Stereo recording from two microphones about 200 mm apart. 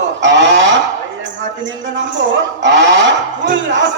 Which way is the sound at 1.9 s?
65° right (ahead or behind).